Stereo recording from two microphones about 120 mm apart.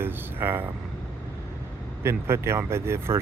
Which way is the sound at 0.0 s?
20° right (ahead or behind).